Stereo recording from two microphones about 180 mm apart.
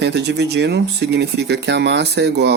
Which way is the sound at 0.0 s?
70° right (ahead or behind).